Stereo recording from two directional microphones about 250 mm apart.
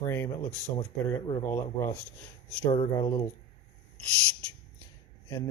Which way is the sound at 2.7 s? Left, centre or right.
Centre.